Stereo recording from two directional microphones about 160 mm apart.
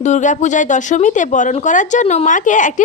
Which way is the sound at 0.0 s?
50° left (ahead or behind).